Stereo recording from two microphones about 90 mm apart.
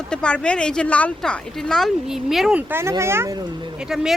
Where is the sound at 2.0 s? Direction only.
5° right (ahead or behind).